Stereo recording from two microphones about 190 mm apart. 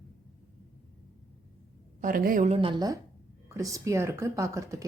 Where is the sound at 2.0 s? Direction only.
45° right (ahead or behind).